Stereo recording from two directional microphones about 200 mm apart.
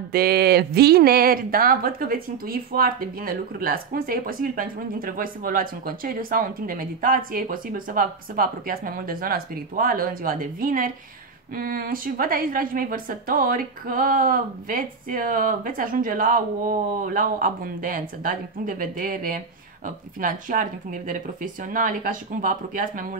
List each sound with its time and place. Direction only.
0.1 s speech: 50° right (ahead or behind)